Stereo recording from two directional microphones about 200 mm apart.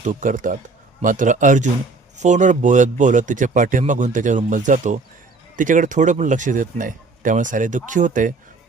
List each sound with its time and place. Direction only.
0.0 s speech: 40° right (ahead or behind)